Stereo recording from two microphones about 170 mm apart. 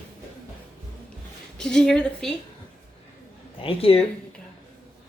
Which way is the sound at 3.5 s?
30° left (ahead or behind).